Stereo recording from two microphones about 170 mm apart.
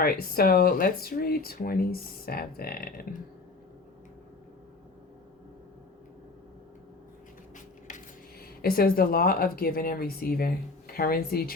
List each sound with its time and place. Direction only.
0.0 s speech: 60° left (ahead or behind)
7.5 s speech: 50° left (ahead or behind)